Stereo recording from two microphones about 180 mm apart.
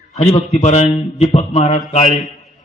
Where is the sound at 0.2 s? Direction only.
35° left (ahead or behind).